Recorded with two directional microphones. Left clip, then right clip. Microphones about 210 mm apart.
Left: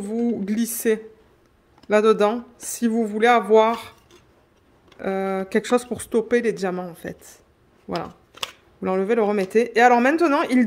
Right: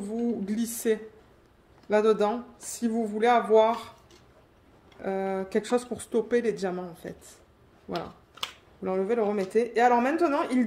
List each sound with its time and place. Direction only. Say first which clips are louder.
0.0 s a woman's voice: left 6 dB; 45° left (ahead or behind)
4.9 s speech: left 5 dB; 45° left (ahead or behind)
8.8 s speech: left 6 dB; 45° left (ahead or behind)